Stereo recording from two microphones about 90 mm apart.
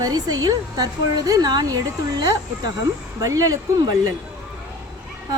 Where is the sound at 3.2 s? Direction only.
40° right (ahead or behind).